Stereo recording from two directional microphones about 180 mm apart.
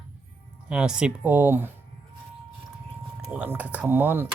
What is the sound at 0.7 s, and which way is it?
Speech, 5° right (ahead or behind).